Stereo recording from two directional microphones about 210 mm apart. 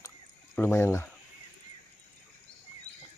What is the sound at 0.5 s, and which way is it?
Speech, 10° left (ahead or behind).